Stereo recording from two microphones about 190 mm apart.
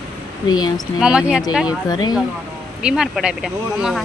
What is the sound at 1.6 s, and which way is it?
Speech, 20° left (ahead or behind).